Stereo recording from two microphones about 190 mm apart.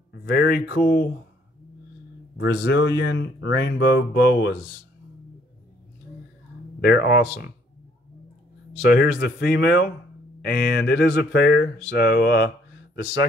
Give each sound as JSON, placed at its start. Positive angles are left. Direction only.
{"t": 0.1, "sound": "speech", "side_deg": 55}
{"t": 2.3, "sound": "speech", "side_deg": 65}
{"t": 6.8, "sound": "speech", "side_deg": 60}
{"t": 9.2, "sound": "speech", "side_deg": 55}